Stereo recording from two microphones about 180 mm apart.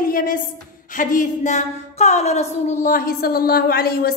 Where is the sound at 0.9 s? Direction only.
45° left (ahead or behind).